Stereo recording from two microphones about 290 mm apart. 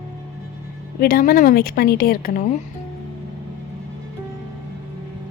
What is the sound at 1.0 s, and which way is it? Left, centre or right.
A woman's voice, left.